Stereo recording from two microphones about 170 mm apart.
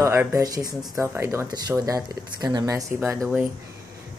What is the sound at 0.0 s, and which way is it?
Speech, 15° right (ahead or behind).